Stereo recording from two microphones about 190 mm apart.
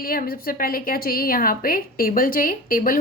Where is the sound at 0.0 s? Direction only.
50° left (ahead or behind).